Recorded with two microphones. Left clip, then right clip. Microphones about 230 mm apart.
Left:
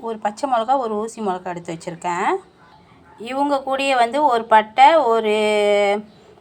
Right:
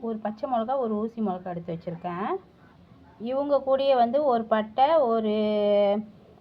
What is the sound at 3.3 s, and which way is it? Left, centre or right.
Speech, left.